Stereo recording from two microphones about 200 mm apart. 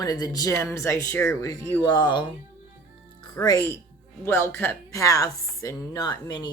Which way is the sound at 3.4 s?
20° left (ahead or behind).